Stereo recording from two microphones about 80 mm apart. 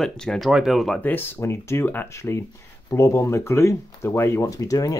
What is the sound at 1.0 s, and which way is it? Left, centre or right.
Speech, left.